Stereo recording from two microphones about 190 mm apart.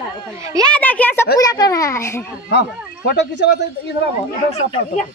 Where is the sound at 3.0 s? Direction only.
65° left (ahead or behind).